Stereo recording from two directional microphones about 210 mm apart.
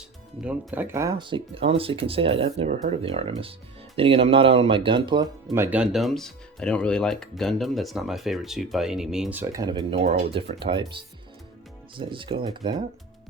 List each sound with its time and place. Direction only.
0.4 s speech: 10° right (ahead or behind); by 12.7 s 25° right (ahead or behind)